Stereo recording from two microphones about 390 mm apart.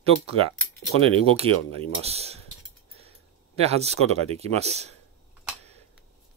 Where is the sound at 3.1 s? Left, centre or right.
Centre.